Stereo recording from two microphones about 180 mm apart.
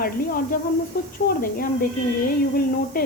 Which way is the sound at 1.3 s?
55° left (ahead or behind).